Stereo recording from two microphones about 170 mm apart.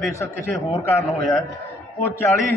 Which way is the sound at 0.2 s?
15° left (ahead or behind).